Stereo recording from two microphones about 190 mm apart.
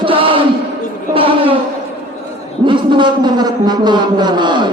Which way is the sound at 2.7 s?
25° right (ahead or behind).